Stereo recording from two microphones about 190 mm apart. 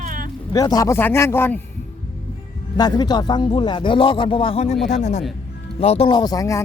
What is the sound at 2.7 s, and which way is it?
Speech, 20° left (ahead or behind).